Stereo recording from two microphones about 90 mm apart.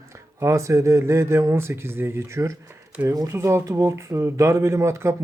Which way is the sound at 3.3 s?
30° right (ahead or behind).